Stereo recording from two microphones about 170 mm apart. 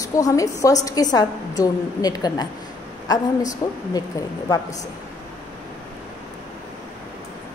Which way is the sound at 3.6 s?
25° left (ahead or behind).